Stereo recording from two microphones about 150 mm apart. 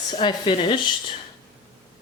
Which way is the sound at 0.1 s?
30° left (ahead or behind).